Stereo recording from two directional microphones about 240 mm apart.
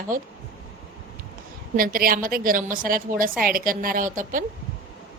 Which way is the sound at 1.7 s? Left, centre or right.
Right.